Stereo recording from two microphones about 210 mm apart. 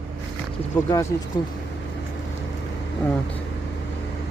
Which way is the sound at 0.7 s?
10° left (ahead or behind).